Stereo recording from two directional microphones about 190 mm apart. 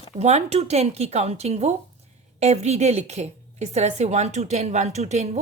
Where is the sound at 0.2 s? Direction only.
35° right (ahead or behind).